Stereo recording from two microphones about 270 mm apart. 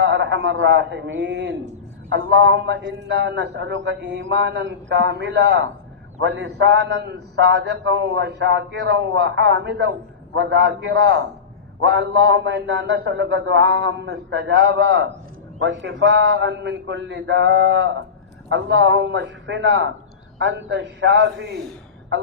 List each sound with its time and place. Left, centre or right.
0.0 s a man's voice: right